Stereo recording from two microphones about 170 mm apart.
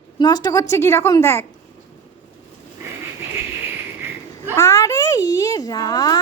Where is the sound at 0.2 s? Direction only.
25° left (ahead or behind).